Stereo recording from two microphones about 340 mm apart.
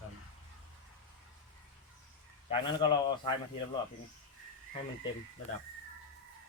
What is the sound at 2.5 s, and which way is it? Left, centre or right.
Speech, centre.